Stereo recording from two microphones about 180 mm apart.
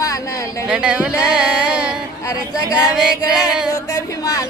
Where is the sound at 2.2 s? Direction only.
20° left (ahead or behind).